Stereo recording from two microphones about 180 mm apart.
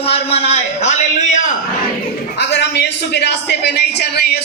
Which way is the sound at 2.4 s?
70° left (ahead or behind).